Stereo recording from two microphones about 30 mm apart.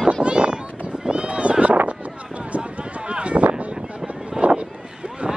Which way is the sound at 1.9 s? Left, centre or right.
Right.